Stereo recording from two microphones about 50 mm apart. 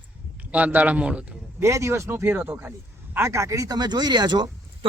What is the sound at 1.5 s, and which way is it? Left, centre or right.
Speech, right.